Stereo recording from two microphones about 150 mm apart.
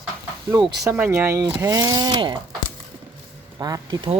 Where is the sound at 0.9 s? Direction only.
15° right (ahead or behind).